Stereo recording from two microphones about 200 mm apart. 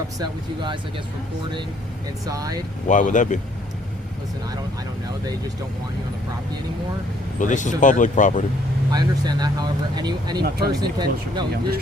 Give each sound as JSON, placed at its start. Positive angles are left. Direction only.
{"t": 0.2, "sound": "speech", "side_deg": -25}
{"t": 2.2, "sound": "speech", "side_deg": -20}
{"t": 2.8, "sound": "speech", "side_deg": 40}
{"t": 7.3, "sound": "speech", "side_deg": 40}
{"t": 8.9, "sound": "speech", "side_deg": -20}